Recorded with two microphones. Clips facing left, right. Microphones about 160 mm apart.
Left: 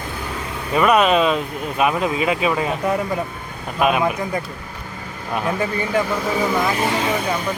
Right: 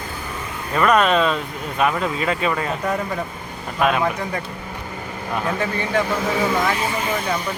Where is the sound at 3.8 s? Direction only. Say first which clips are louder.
Left 1 dB; 15° left (ahead or behind).